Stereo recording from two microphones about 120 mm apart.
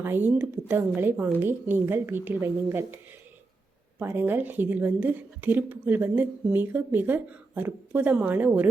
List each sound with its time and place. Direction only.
0.0 s a woman's voice: 15° right (ahead or behind)
3.9 s a woman's voice: 15° right (ahead or behind)